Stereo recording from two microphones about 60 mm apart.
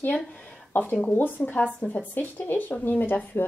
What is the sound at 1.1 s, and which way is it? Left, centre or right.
Speech, left.